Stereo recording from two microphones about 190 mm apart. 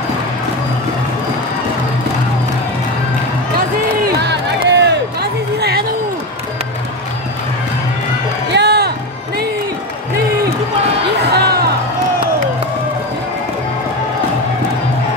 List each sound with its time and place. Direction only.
4.0 s crowd: 60° right (ahead or behind)
8.5 s music: 60° right (ahead or behind)
11.3 s music: 60° right (ahead or behind)